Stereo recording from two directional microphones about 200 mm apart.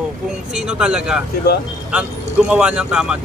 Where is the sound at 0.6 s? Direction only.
5° right (ahead or behind).